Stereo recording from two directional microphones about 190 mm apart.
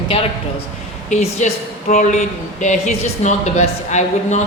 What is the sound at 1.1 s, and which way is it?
Speech, 40° left (ahead or behind).